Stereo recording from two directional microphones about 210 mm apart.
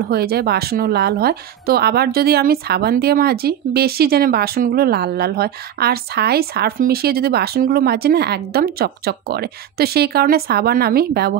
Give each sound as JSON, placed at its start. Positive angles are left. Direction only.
{"t": 0.1, "sound": "a woman's voice", "side_deg": -50}